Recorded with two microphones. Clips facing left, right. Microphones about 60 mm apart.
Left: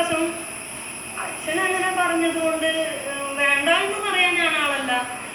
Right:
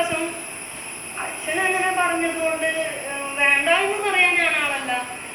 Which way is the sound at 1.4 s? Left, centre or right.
Right.